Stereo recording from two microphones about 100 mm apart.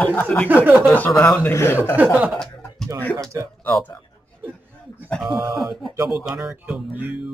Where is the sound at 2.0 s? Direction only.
15° right (ahead or behind).